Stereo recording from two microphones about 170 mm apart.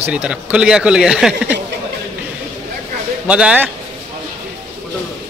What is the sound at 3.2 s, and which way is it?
Speech, 5° right (ahead or behind).